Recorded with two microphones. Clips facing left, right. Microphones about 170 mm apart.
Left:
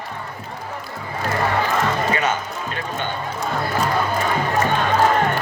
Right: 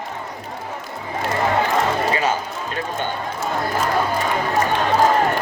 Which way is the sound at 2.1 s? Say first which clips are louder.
Right 1 dB; 35° right (ahead or behind).